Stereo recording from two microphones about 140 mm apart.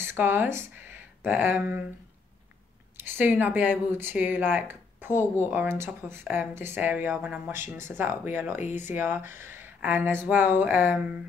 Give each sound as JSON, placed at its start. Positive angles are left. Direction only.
{"t": 0.0, "sound": "speech", "side_deg": -15}
{"t": 3.0, "sound": "speech", "side_deg": -15}